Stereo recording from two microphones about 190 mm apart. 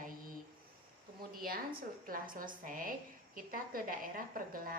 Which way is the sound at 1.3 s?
50° right (ahead or behind).